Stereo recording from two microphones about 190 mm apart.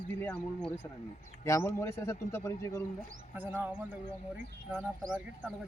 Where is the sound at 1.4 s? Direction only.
15° left (ahead or behind).